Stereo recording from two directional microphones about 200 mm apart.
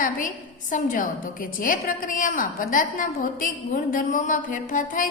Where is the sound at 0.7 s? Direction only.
40° left (ahead or behind).